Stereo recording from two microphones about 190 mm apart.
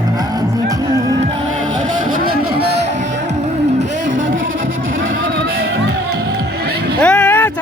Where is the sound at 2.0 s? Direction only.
50° right (ahead or behind).